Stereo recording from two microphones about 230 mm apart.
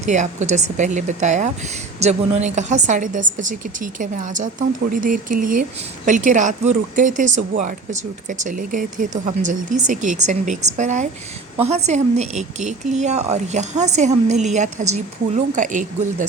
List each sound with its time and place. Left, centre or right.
0.1 s a woman's voice: right